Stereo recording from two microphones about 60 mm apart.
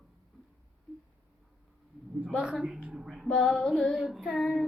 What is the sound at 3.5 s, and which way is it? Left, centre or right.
Child singing, centre.